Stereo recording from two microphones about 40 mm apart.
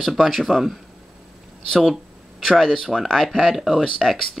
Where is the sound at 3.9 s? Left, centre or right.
Centre.